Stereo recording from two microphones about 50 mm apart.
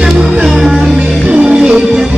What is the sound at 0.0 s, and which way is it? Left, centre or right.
Music, centre.